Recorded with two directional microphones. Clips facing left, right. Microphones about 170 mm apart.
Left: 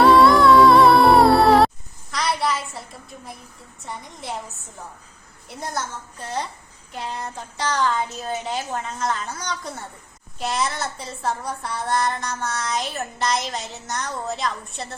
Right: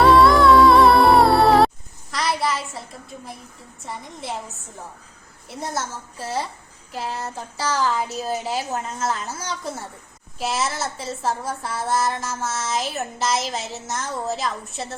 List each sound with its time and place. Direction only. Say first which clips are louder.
0.0 s music: even; centre (ahead or behind)
3.8 s speech: right 1 dB; centre (ahead or behind)